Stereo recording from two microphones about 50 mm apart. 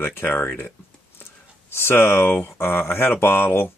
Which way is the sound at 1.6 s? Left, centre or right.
Left.